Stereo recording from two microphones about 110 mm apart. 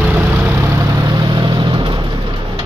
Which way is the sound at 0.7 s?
40° right (ahead or behind).